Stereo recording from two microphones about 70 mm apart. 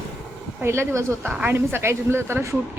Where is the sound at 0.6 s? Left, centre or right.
Right.